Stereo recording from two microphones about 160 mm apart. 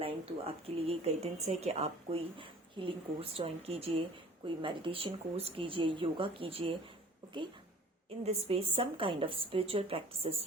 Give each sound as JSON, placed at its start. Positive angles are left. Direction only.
{"t": 0.0, "sound": "a woman's voice", "side_deg": -35}
{"t": 8.2, "sound": "a woman's voice", "side_deg": -40}